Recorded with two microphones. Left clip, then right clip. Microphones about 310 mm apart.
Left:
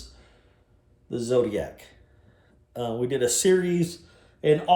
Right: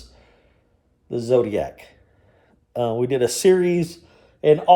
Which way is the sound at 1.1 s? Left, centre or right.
Right.